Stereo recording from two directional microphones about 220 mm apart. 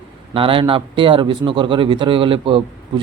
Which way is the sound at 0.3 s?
25° right (ahead or behind).